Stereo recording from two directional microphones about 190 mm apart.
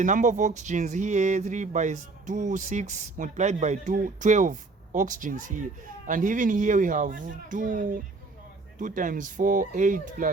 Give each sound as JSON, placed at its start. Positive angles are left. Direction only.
{"t": 0.0, "sound": "speech", "side_deg": -40}